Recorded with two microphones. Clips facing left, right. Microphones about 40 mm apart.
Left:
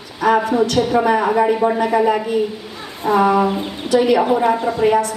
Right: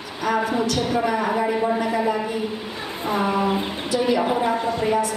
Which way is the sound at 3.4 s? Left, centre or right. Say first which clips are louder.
Left 3 dB; centre.